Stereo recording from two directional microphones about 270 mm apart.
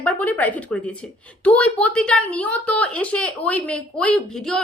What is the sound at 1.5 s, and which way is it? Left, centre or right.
A woman's voice, centre.